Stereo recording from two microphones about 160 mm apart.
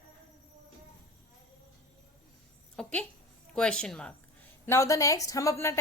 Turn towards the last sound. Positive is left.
turn(degrees=20)  # may be behind; listen again after turning